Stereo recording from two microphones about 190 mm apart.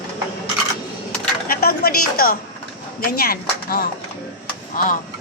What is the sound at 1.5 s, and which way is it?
A woman's voice, 55° left (ahead or behind).